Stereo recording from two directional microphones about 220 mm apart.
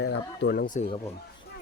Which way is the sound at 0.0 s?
50° left (ahead or behind).